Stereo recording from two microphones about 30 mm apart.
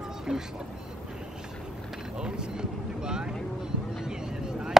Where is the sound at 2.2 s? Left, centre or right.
Right.